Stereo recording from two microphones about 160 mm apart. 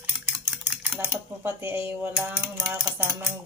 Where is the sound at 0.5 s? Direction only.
5° right (ahead or behind).